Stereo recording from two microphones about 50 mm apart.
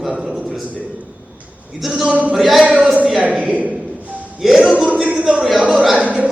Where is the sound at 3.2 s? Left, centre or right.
Right.